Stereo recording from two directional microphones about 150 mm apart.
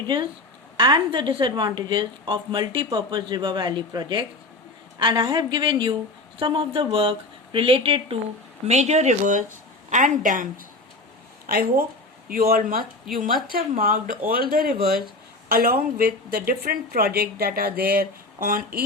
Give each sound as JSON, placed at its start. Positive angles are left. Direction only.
{"t": 0.8, "sound": "a woman's voice", "side_deg": -30}
{"t": 11.4, "sound": "speech", "side_deg": -75}